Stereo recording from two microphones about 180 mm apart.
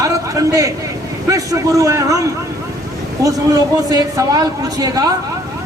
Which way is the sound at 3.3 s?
20° right (ahead or behind).